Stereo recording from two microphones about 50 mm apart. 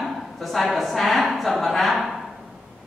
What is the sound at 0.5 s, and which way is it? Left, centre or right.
Speech, centre.